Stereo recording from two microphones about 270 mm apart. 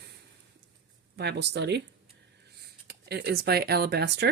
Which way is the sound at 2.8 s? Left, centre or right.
Right.